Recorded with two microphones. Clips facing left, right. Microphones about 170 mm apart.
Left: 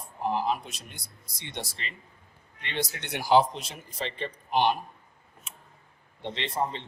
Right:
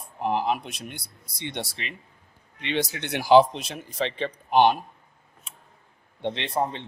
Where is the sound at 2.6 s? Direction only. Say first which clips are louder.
Right 6 dB; 90° right; by 4.8 s 65° right (ahead or behind).